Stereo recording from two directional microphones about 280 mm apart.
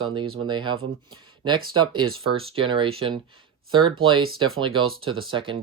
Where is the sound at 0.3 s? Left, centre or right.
Centre.